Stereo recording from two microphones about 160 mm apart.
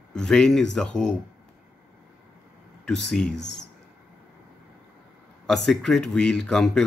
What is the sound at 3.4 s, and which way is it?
Speech, 90° left.